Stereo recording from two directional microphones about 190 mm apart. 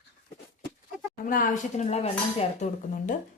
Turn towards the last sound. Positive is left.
turn(degrees=40)  # may be behind; listen again after turning